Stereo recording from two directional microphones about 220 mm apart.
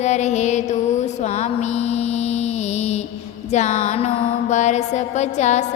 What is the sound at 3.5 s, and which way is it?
Mantra, 30° left (ahead or behind).